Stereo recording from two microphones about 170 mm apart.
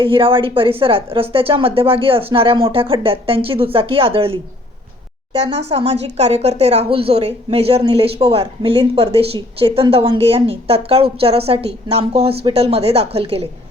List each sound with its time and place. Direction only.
0.0 s a woman's voice: 30° right (ahead or behind)
5.6 s a woman's voice: 40° right (ahead or behind)